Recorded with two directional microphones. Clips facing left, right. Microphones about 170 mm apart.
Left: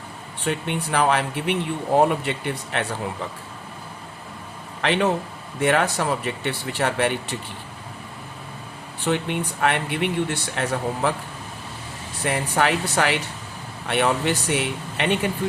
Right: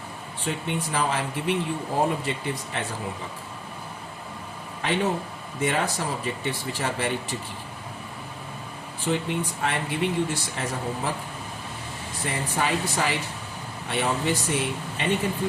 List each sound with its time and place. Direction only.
0.4 s speech: 70° left (ahead or behind)
4.8 s speech: 80° left
5.5 s speech: 70° left (ahead or behind)
9.0 s speech: 65° left (ahead or behind)
12.2 s speech: 70° left (ahead or behind)